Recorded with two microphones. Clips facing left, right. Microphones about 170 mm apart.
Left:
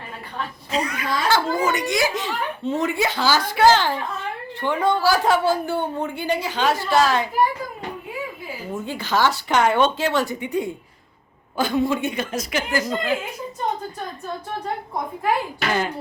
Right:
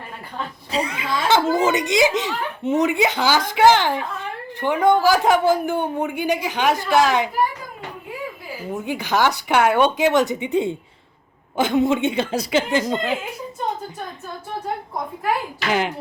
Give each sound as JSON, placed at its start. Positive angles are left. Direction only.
{"t": 0.7, "sound": "speech", "side_deg": -30}
{"t": 8.7, "sound": "speech", "side_deg": -15}